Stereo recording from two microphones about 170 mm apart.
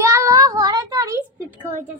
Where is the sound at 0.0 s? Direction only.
15° right (ahead or behind).